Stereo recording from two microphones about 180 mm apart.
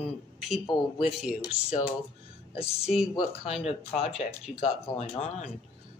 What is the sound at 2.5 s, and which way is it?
Speech, 35° left (ahead or behind).